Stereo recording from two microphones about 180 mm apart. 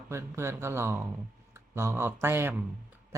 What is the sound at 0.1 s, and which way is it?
Speech, 15° right (ahead or behind).